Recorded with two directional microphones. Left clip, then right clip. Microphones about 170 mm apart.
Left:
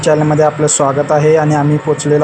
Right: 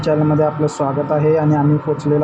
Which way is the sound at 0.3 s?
20° left (ahead or behind).